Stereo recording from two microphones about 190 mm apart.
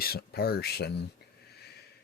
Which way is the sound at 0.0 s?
55° left (ahead or behind).